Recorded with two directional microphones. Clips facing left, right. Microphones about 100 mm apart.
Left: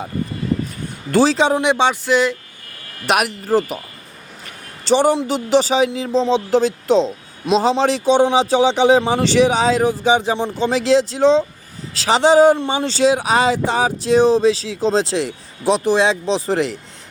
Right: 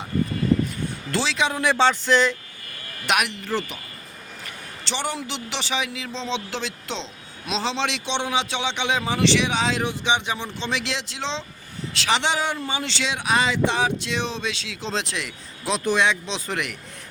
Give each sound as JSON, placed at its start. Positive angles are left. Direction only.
{"t": 1.1, "sound": "speech", "side_deg": 40}
{"t": 1.5, "sound": "a sound", "side_deg": 20}
{"t": 3.1, "sound": "speech", "side_deg": 40}
{"t": 4.9, "sound": "speech", "side_deg": 40}